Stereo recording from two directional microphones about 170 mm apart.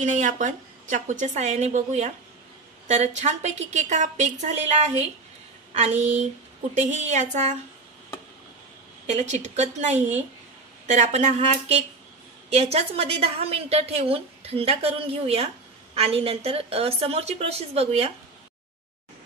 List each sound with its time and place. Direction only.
0.0 s a woman's voice: 45° right (ahead or behind)
9.0 s a woman's voice: 45° right (ahead or behind)